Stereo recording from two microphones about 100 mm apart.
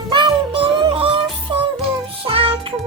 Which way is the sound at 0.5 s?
60° right (ahead or behind).